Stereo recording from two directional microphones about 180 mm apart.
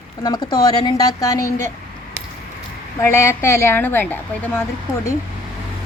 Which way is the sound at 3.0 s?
15° left (ahead or behind).